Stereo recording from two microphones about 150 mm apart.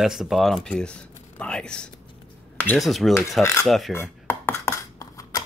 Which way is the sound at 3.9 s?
15° left (ahead or behind).